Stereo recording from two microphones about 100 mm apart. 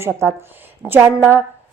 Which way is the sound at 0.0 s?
25° right (ahead or behind).